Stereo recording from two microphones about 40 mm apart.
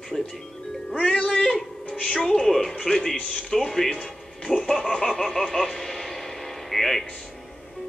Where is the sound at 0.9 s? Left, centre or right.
Left.